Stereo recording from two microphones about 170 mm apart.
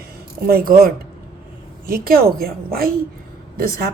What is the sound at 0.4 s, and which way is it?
A woman's voice, 60° right (ahead or behind).